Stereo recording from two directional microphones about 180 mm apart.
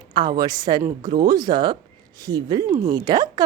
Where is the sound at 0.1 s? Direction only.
25° right (ahead or behind).